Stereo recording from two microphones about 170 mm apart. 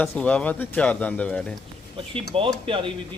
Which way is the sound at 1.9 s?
30° right (ahead or behind).